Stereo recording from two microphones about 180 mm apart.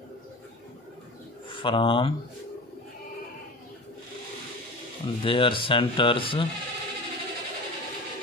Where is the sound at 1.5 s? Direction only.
30° left (ahead or behind).